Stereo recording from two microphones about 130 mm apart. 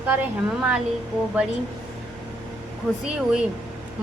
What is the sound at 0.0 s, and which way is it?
Speech, 10° right (ahead or behind).